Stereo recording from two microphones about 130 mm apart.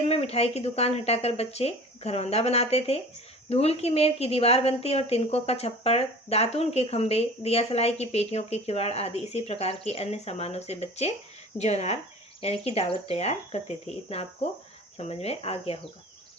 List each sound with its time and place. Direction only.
0.1 s a woman's voice: 50° left (ahead or behind)